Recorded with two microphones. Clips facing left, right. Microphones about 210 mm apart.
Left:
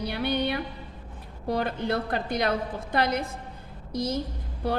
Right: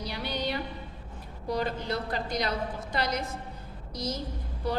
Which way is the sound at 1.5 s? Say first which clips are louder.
Left 3 dB; 55° left (ahead or behind).